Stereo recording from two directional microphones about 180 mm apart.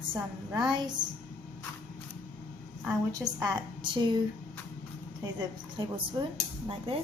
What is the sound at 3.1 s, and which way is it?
A woman's voice, 20° right (ahead or behind).